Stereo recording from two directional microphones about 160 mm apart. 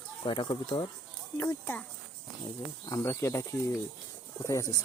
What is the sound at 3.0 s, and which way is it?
Speech, 15° left (ahead or behind).